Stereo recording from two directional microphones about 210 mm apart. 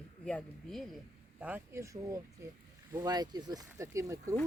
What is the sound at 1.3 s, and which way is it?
Speech, 5° right (ahead or behind).